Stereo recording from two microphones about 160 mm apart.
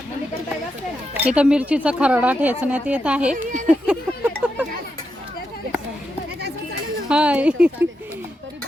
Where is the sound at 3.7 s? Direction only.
10° right (ahead or behind).